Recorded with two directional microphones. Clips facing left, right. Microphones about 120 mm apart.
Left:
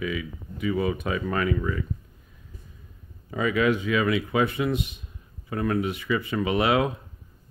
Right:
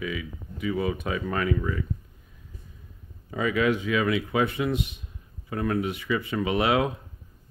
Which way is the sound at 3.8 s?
90° left.